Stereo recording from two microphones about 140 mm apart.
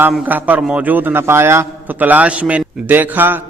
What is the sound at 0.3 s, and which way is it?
A man's voice, 10° right (ahead or behind).